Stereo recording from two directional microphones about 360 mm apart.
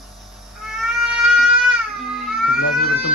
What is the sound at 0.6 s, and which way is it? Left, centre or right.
Cat, centre.